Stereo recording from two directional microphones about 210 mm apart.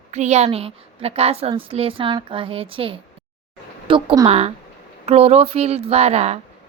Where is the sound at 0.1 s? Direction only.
35° right (ahead or behind).